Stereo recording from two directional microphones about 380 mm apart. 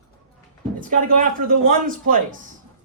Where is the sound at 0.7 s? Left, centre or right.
Right.